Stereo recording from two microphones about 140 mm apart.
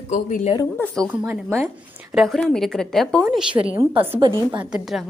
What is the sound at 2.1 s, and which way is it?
A woman's voice, centre (ahead or behind).